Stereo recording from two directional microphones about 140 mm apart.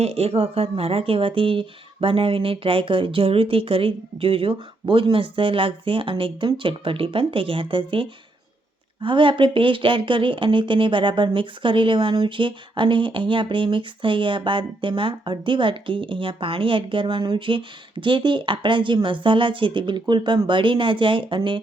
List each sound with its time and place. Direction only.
0.0 s speech: 45° right (ahead or behind)